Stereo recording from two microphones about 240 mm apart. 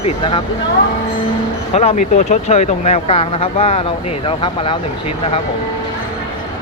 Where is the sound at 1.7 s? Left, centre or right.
Left.